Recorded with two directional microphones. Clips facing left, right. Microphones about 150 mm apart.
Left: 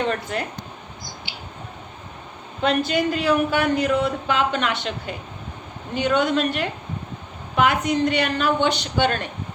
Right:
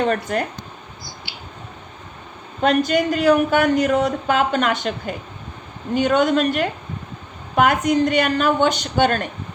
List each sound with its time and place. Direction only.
0.1 s speech: 45° right (ahead or behind)
2.6 s speech: 45° right (ahead or behind)